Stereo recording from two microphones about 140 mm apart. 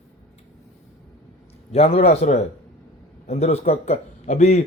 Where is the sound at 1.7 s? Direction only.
45° left (ahead or behind).